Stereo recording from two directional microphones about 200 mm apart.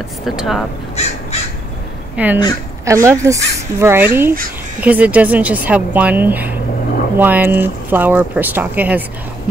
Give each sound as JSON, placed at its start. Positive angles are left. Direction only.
{"t": 0.2, "sound": "speech", "side_deg": 0}
{"t": 1.0, "sound": "crow", "side_deg": 35}
{"t": 2.1, "sound": "speech", "side_deg": -10}